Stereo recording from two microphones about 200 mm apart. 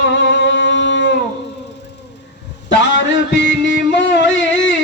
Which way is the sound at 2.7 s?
65° left (ahead or behind).